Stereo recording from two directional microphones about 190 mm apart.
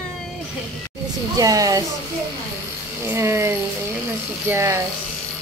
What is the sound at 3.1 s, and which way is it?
Speech, 15° right (ahead or behind).